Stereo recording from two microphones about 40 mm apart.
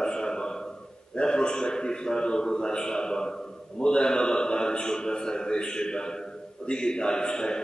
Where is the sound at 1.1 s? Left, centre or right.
Left.